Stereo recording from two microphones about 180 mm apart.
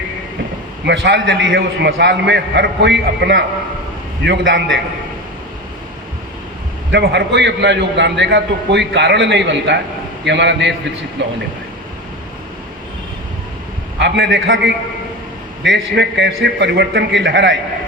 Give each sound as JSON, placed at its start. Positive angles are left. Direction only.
{"t": 0.9, "sound": "a man's voice", "side_deg": -80}
{"t": 6.9, "sound": "a man's voice", "side_deg": -70}
{"t": 14.0, "sound": "a man's voice", "side_deg": -75}